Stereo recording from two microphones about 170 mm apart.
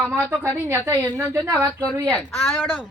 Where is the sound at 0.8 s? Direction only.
15° right (ahead or behind).